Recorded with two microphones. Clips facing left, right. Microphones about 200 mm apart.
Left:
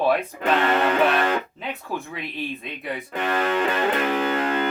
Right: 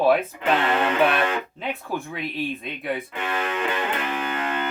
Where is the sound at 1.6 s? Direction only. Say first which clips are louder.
Right 2 dB; centre (ahead or behind).